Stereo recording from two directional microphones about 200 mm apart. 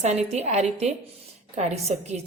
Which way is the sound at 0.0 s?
35° right (ahead or behind).